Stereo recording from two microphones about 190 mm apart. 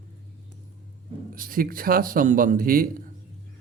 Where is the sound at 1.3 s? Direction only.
45° right (ahead or behind).